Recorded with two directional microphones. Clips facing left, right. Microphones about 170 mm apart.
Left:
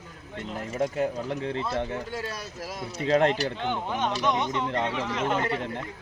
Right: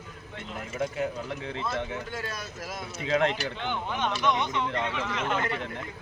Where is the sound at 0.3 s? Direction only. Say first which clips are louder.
Left 4 dB; 40° left (ahead or behind).